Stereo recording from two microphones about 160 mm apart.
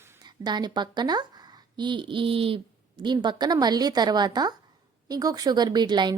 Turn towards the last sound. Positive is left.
turn(degrees=-25)  # may be behind; listen again after turning